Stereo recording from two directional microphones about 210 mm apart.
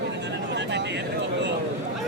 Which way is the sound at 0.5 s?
55° right (ahead or behind).